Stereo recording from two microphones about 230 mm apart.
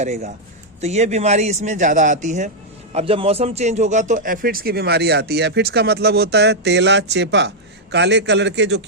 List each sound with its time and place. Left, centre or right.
0.0 s a man's voice: right